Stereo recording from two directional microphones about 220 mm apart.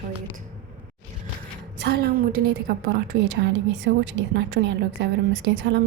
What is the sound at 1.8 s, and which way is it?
A woman's voice, 45° right (ahead or behind).